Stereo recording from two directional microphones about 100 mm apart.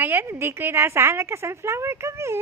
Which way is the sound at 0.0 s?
20° right (ahead or behind).